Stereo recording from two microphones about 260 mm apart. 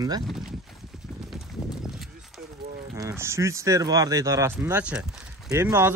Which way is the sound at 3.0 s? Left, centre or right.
Centre.